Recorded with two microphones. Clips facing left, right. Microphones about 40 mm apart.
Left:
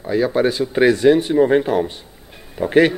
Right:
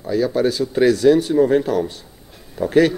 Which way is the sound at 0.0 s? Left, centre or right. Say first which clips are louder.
Left 1 dB; left.